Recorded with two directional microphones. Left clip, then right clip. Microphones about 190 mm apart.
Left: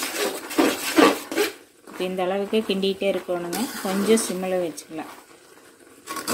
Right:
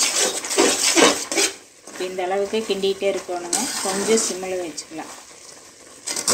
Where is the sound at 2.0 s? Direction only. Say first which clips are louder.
Right 2 dB; 50° left (ahead or behind).